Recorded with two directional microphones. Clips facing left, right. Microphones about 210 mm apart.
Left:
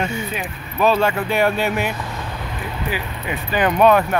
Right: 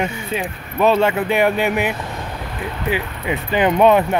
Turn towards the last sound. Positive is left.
turn(degrees=-20)  # may be behind; listen again after turning